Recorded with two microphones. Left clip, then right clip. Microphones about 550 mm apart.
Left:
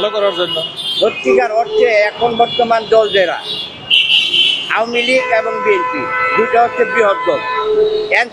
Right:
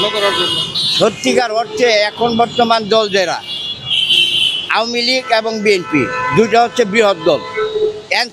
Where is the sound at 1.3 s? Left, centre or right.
Right.